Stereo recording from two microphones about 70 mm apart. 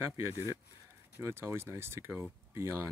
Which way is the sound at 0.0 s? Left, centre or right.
Right.